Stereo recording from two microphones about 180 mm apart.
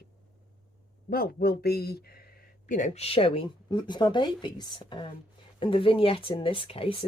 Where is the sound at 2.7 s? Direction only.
45° left (ahead or behind).